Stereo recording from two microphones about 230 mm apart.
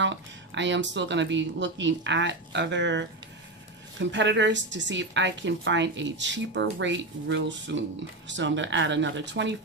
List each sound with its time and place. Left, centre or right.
0.0 s speech: right